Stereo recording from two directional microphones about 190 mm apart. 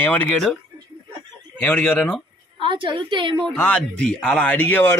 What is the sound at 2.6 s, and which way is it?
Speech, 25° right (ahead or behind).